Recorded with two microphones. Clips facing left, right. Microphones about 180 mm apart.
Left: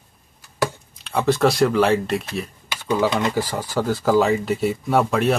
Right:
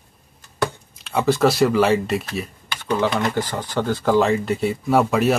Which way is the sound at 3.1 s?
15° left (ahead or behind).